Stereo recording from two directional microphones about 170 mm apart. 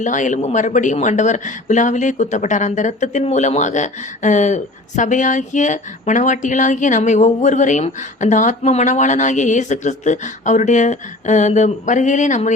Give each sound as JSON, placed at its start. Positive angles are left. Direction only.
{"t": 0.0, "sound": "speech", "side_deg": 45}